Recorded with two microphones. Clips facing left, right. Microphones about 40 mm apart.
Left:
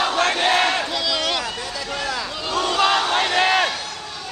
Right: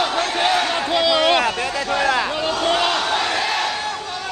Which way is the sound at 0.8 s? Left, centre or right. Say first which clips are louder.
Right 7 dB; right.